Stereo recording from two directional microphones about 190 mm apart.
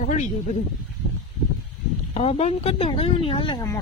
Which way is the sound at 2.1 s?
35° left (ahead or behind).